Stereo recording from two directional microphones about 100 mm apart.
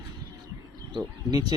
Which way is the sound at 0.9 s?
45° right (ahead or behind).